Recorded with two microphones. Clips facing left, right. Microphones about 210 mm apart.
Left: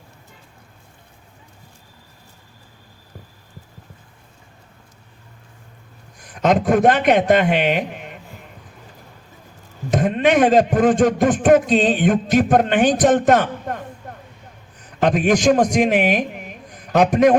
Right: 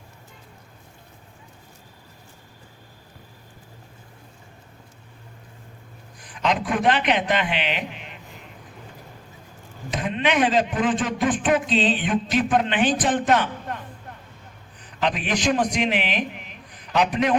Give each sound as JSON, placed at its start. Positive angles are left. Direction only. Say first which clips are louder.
{"t": 6.1, "sound": "speech", "louder": "left 7 dB", "side_deg": 45}
{"t": 9.9, "sound": "a man's voice", "louder": "left 7 dB", "side_deg": 45}